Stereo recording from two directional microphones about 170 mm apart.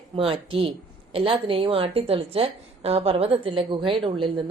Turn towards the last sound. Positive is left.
turn(degrees=-30)  # may be behind; listen again after turning